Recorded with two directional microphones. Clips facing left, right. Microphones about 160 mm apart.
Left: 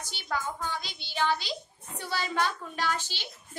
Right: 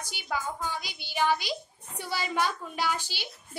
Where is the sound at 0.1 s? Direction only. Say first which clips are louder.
Even; 10° right (ahead or behind).